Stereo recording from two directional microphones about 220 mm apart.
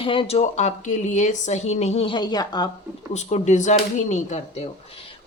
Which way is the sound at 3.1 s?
30° left (ahead or behind).